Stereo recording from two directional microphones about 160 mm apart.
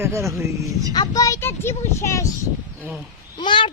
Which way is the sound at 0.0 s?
20° right (ahead or behind).